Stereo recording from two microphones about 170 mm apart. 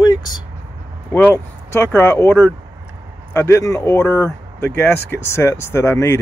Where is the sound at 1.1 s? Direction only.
10° left (ahead or behind).